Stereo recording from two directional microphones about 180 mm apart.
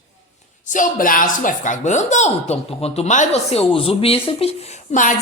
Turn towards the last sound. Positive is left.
turn(degrees=40)  # may be behind; listen again after turning